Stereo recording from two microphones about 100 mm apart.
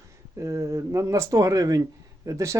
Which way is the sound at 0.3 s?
30° right (ahead or behind).